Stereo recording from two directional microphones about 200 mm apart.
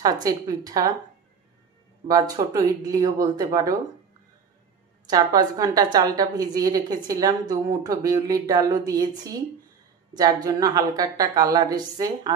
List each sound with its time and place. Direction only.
0.0 s speech: 20° right (ahead or behind)
2.0 s speech: 20° right (ahead or behind)
5.0 s a woman's voice: 20° right (ahead or behind)